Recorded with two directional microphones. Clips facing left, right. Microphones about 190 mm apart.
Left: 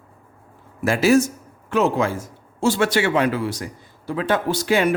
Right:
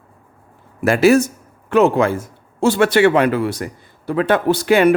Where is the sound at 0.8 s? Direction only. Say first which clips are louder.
Right 4 dB; 60° right (ahead or behind).